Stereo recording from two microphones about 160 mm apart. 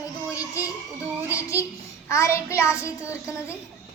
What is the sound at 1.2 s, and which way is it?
A child's voice, 20° left (ahead or behind).